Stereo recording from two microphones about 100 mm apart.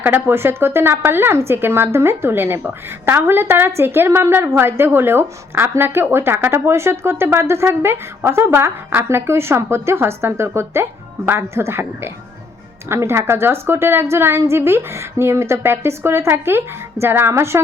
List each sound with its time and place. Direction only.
0.0 s speech: 20° right (ahead or behind)
12.9 s speech: 25° right (ahead or behind)